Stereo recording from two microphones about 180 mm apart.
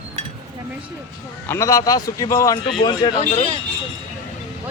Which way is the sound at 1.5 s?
15° left (ahead or behind).